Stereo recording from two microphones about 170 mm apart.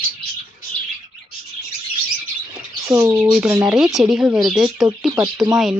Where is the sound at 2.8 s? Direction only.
20° right (ahead or behind); by 5.1 s centre (ahead or behind).